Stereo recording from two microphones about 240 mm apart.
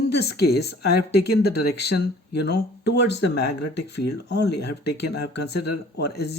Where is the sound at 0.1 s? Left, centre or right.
Left.